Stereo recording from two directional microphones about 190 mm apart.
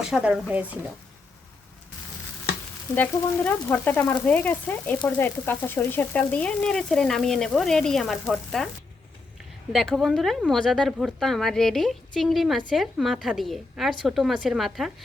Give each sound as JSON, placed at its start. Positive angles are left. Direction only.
{"t": 0.0, "sound": "frying", "side_deg": -5}
{"t": 2.9, "sound": "frying", "side_deg": 10}
{"t": 9.7, "sound": "frying", "side_deg": 0}